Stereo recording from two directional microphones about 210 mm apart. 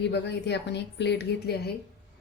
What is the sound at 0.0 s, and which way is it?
Speech, 55° left (ahead or behind).